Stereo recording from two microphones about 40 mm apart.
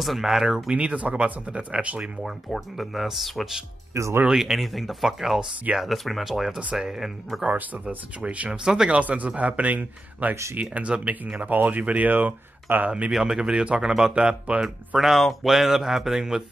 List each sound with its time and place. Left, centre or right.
0.0 s speech: centre
0.7 s speech: right
2.2 s speech: centre
7.4 s speech: right
8.5 s speech: centre
8.9 s speech: right
10.6 s speech: right
11.4 s speech: right
13.2 s speech: centre
15.0 s speech: centre